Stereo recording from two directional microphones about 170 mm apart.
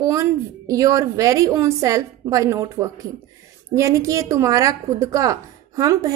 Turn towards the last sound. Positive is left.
turn(degrees=-20)  # may be behind; listen again after turning